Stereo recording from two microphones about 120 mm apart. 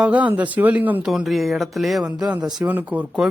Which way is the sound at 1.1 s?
Centre (ahead or behind).